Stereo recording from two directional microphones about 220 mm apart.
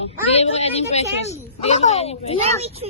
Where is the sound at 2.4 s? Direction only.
25° right (ahead or behind).